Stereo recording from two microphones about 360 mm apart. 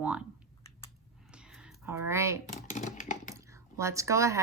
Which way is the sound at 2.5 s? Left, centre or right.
Left.